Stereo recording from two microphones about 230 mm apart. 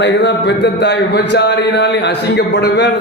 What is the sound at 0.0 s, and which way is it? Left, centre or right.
Speech, left.